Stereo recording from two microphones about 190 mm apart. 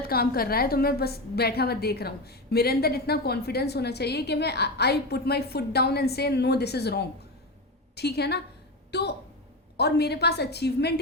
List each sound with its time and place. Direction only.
0.0 s a woman's voice: 55° left (ahead or behind)